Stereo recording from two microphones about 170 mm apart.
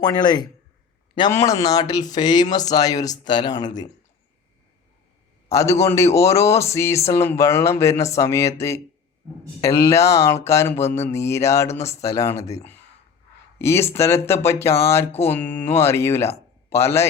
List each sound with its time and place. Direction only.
0.0 s speech: 25° left (ahead or behind)
5.5 s a man's voice: 20° left (ahead or behind)